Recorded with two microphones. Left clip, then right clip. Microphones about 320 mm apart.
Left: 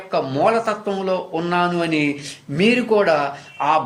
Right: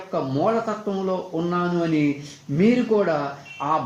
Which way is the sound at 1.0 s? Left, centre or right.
Left.